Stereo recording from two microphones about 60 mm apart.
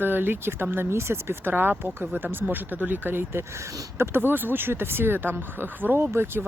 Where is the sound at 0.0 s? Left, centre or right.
Right.